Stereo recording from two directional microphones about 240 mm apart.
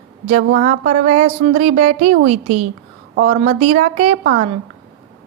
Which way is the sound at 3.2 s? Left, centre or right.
Right.